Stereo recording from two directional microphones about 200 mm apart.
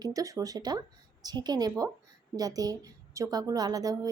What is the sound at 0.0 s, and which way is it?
A woman's voice, 15° right (ahead or behind).